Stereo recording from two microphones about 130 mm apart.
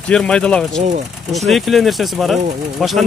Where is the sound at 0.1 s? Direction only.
5° left (ahead or behind).